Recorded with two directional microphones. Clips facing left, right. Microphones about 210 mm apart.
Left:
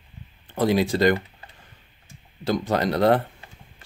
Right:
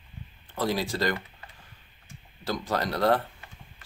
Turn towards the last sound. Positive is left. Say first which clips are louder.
# left 5 dB
turn(degrees=20)  # may be behind; listen again after turning